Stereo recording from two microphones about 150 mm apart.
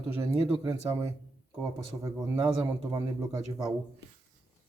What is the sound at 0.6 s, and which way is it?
Speech, 20° right (ahead or behind).